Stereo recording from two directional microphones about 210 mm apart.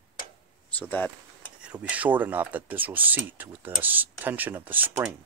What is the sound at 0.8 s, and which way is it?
Speech, 5° left (ahead or behind).